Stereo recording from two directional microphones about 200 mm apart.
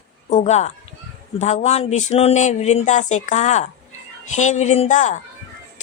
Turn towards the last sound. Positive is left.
turn(degrees=35)  # may be behind; listen again after turning